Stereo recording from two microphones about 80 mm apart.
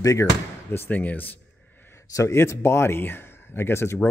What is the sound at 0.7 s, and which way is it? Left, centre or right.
Speech, left.